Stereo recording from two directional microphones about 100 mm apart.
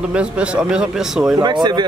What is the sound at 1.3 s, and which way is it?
Speech, 45° right (ahead or behind).